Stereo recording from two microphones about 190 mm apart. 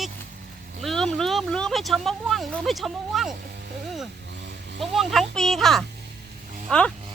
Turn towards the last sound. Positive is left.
turn(degrees=5)  # may be behind; listen again after turning